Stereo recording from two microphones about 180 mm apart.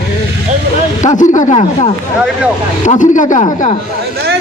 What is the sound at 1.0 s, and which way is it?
A man's voice, 45° left (ahead or behind).